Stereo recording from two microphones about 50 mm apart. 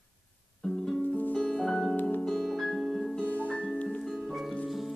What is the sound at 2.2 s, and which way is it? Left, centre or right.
Piano, centre.